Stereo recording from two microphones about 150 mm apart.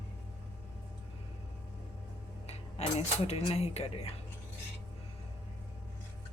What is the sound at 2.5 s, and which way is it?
Speech, 45° left (ahead or behind).